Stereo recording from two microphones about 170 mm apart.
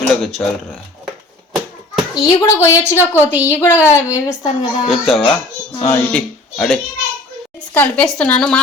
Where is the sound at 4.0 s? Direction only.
10° right (ahead or behind).